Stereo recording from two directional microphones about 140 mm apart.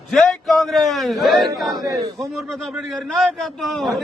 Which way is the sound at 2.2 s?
Centre (ahead or behind).